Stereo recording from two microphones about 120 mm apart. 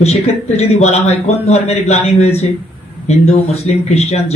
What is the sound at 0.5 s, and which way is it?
A man's voice, 65° left (ahead or behind).